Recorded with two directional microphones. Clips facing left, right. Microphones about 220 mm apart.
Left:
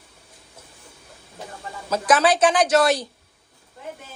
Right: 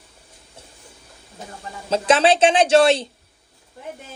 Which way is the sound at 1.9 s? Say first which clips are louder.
Right 2 dB; 25° right (ahead or behind).